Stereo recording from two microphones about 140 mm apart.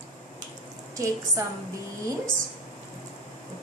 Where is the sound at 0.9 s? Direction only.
20° right (ahead or behind).